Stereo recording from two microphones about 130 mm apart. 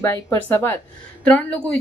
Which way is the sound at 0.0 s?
20° left (ahead or behind).